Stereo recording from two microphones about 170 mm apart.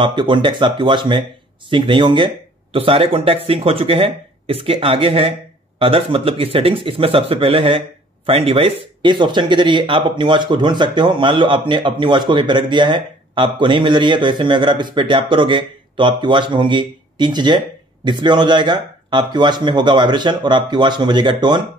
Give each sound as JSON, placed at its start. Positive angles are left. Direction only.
{"t": 0.0, "sound": "speech", "side_deg": -25}